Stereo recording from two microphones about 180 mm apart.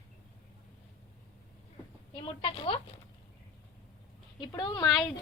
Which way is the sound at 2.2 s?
30° left (ahead or behind).